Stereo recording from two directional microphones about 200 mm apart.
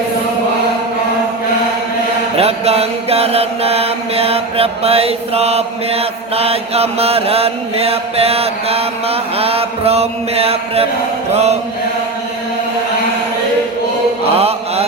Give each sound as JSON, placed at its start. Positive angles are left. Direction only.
{"t": 2.3, "sound": "mantra", "side_deg": -30}
{"t": 11.3, "sound": "chant", "side_deg": -30}
{"t": 14.3, "sound": "mantra", "side_deg": -30}